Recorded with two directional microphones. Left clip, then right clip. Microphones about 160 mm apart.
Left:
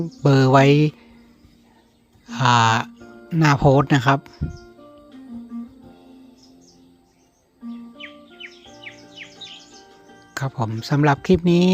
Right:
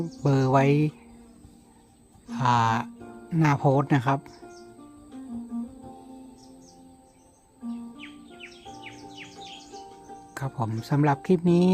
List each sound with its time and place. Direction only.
0.2 s speech: 25° left (ahead or behind)
2.2 s speech: 20° left (ahead or behind)
7.9 s music: 40° right (ahead or behind)
10.3 s speech: 20° left (ahead or behind)